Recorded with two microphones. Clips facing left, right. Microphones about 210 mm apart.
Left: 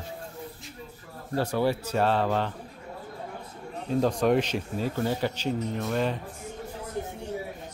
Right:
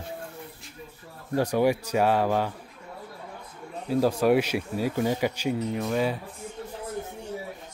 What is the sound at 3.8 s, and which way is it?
Speech, 5° right (ahead or behind).